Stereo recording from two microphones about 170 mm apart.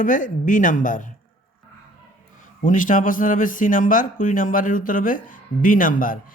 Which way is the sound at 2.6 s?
50° left (ahead or behind).